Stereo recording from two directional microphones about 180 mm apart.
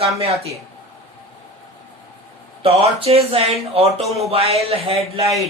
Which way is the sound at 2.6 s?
35° right (ahead or behind).